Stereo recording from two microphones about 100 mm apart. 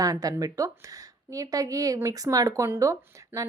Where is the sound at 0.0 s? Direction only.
40° right (ahead or behind).